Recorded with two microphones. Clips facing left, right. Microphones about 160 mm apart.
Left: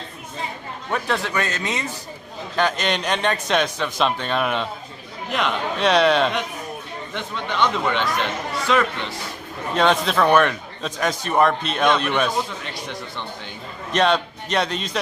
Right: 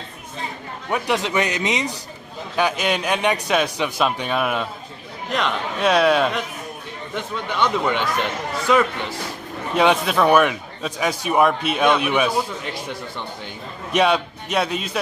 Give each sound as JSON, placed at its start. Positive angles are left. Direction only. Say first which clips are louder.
{"t": 0.9, "sound": "a man's voice", "louder": "right 3 dB", "side_deg": -15}
{"t": 9.8, "sound": "speech", "louder": "right 1 dB", "side_deg": -10}
{"t": 13.9, "sound": "speech", "louder": "right 1 dB", "side_deg": -10}